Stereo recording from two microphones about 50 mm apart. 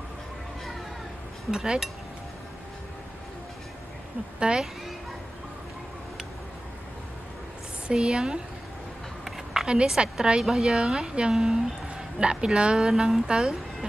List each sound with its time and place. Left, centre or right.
1.5 s speech: centre
4.5 s a child's voice: right
7.9 s speech: centre
9.2 s a sound: centre
9.8 s speech: centre